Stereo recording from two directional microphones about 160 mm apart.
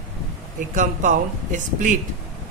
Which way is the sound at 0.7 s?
55° right (ahead or behind).